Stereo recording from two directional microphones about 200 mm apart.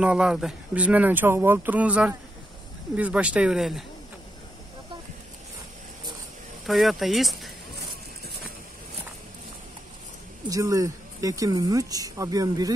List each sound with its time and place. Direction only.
0.0 s speech: 5° right (ahead or behind)
6.6 s speech: centre (ahead or behind)
10.5 s speech: 15° right (ahead or behind)